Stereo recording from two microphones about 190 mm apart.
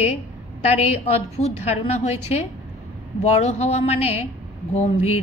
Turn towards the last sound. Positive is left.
turn(degrees=35)  # may be behind; listen again after turning